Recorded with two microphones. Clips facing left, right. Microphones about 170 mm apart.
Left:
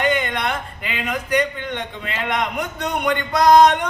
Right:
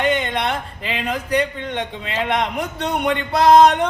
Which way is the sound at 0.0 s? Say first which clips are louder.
Right 1 dB; 30° right (ahead or behind).